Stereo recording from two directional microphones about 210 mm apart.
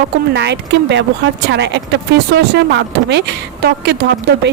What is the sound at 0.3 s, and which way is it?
Speech, 55° right (ahead or behind).